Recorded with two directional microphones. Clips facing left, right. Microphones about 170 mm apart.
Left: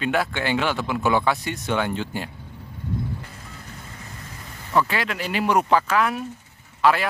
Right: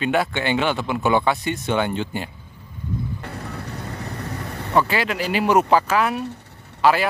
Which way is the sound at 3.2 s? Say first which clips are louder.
Right 10 dB; 65° right (ahead or behind).